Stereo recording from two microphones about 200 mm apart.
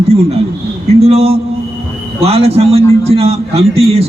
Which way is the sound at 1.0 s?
30° right (ahead or behind).